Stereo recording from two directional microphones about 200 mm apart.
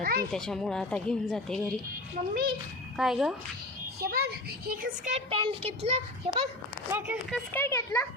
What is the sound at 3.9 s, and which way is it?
Speech, 50° right (ahead or behind).